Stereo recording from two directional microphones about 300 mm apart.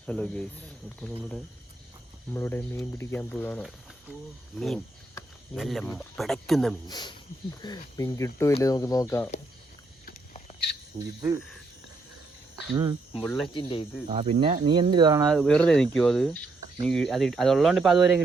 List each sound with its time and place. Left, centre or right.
0.0 s speech: centre
6.8 s speech: centre
11.2 s speech: centre
12.7 s speech: centre
13.1 s speech: centre
13.5 s speech: centre
14.1 s speech: centre
15.3 s speech: centre